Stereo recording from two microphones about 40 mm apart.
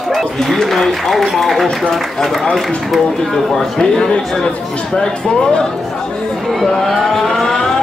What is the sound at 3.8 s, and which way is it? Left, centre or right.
Speech, centre.